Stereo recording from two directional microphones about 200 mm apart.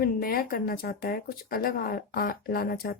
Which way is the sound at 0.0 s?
50° left (ahead or behind).